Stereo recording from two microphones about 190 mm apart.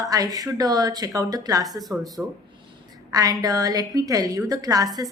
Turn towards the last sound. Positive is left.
turn(degrees=-20)  # may be behind; listen again after turning